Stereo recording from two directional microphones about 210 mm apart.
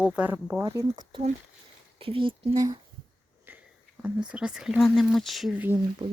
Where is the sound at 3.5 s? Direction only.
10° right (ahead or behind).